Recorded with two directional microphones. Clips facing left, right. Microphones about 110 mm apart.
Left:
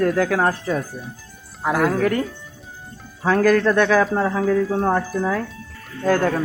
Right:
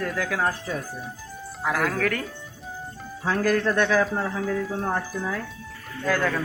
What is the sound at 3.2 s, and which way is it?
Speech, 90° left.